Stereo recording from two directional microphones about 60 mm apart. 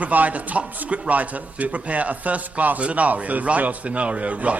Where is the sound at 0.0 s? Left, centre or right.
Right.